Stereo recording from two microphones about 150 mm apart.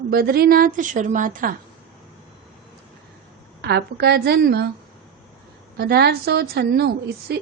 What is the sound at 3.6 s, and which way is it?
A woman's voice, 90° right.